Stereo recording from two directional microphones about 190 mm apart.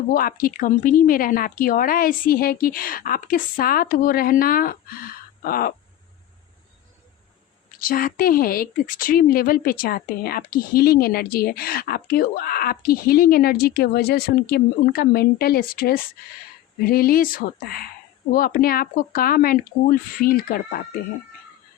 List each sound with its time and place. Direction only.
0.1 s speech: 50° left (ahead or behind)
7.8 s speech: 50° left (ahead or behind)